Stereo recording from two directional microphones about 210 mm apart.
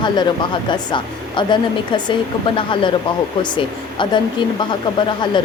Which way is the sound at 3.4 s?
20° left (ahead or behind).